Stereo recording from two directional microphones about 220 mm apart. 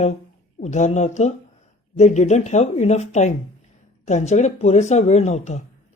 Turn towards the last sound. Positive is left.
turn(degrees=30)  # may be behind; listen again after turning